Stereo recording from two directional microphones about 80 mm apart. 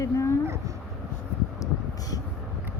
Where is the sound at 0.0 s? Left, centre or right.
Left.